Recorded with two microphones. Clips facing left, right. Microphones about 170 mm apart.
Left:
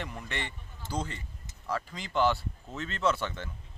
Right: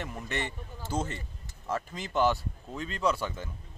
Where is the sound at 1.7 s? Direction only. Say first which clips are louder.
Right 1 dB; 20° right (ahead or behind).